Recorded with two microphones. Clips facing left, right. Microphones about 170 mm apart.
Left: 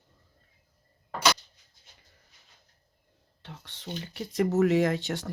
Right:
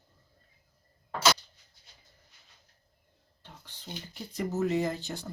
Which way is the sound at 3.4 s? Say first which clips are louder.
Left 6 dB; 75° left (ahead or behind).